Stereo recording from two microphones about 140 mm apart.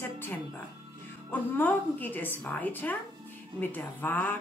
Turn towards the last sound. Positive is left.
turn(degrees=15)  # may be behind; listen again after turning